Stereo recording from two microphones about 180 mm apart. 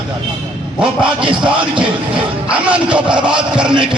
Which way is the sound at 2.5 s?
5° right (ahead or behind).